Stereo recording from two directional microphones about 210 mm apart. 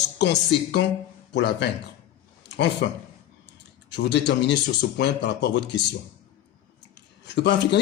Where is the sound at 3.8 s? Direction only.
55° left (ahead or behind).